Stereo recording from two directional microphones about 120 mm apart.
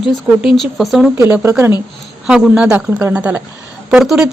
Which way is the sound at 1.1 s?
20° right (ahead or behind).